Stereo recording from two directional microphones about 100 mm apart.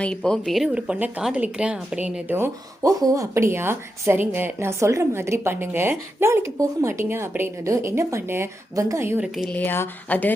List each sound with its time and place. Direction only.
0.0 s speech: 10° left (ahead or behind)
0.7 s speech: 15° right (ahead or behind)
2.8 s speech: 35° right (ahead or behind)
9.2 s speech: 5° right (ahead or behind)
9.5 s speech: 20° left (ahead or behind)